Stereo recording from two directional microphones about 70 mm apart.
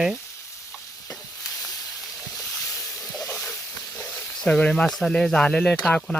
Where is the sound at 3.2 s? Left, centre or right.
Left.